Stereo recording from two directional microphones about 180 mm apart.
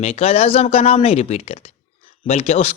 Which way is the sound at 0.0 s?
35° left (ahead or behind).